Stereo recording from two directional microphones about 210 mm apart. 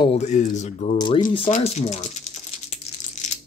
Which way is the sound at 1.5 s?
35° left (ahead or behind).